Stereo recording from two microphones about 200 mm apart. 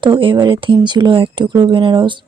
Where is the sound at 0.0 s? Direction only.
25° right (ahead or behind).